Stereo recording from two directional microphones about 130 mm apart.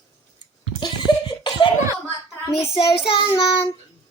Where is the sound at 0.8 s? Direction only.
35° left (ahead or behind).